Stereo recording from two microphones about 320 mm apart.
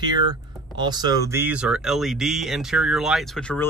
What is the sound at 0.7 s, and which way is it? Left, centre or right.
Speech, centre.